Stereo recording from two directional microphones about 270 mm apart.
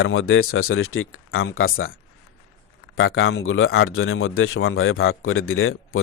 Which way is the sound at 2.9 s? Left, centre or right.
Left.